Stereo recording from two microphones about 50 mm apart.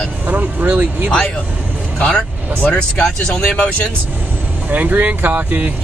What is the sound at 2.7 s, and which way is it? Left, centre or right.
Speech, centre.